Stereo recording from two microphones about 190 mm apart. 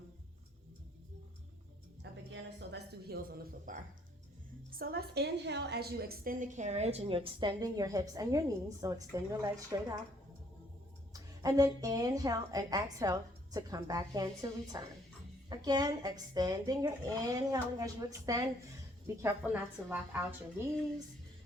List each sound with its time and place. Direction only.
2.3 s a sound: 60° right (ahead or behind)
4.7 s a woman's voice: 55° right (ahead or behind); by 10.0 s 20° right (ahead or behind)
11.1 s a woman's voice: 20° right (ahead or behind)